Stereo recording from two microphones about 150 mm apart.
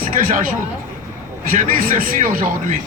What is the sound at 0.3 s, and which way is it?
A man's voice, 65° right (ahead or behind).